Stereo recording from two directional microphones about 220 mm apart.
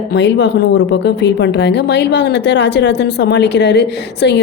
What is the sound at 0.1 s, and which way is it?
A woman's voice, 50° left (ahead or behind).